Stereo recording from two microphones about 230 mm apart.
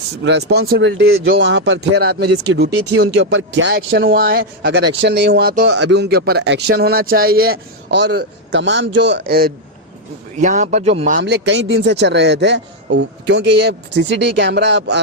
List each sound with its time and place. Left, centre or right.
0.2 s a man's voice: right
0.9 s a man's voice: right
2.7 s speech: right
3.0 s a man's voice: right
11.2 s a man's voice: right